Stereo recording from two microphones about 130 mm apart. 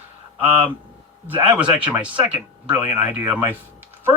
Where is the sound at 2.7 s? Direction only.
10° right (ahead or behind).